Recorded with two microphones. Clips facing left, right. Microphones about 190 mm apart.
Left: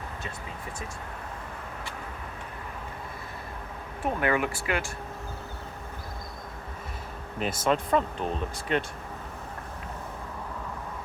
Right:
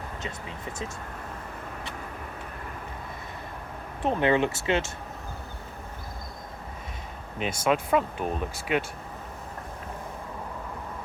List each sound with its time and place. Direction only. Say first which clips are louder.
4.0 s speech: right 3 dB; 25° right (ahead or behind)
7.3 s speech: right 1 dB; centre (ahead or behind)